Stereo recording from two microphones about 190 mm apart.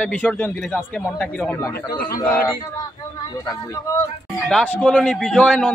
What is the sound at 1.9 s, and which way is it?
Speech, 50° left (ahead or behind).